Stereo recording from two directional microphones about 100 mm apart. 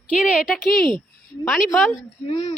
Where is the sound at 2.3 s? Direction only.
50° left (ahead or behind).